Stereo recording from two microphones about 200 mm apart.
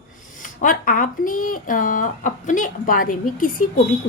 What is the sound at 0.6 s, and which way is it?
Speech, 45° left (ahead or behind).